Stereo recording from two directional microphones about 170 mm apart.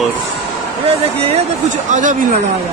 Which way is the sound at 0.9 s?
35° right (ahead or behind).